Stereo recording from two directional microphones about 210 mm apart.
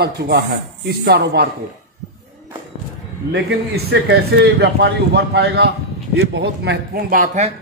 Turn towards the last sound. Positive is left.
turn(degrees=-35)  # may be behind; listen again after turning